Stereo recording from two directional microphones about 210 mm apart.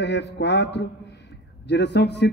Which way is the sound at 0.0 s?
55° left (ahead or behind).